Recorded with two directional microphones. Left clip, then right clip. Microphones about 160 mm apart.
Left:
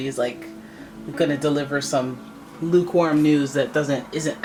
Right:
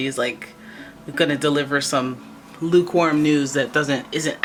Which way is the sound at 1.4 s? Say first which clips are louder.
Right 3 dB; 25° right (ahead or behind).